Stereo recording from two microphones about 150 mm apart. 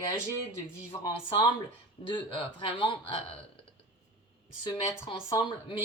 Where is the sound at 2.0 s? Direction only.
35° left (ahead or behind).